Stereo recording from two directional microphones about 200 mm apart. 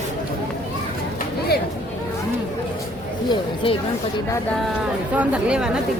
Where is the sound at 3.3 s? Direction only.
25° left (ahead or behind).